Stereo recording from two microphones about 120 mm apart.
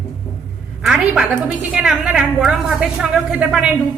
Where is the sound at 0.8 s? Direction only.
5° right (ahead or behind).